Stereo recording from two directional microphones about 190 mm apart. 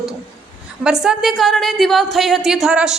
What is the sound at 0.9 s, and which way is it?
A woman's voice, centre (ahead or behind).